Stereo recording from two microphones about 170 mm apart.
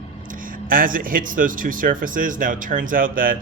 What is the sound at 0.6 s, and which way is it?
Speech, 55° right (ahead or behind).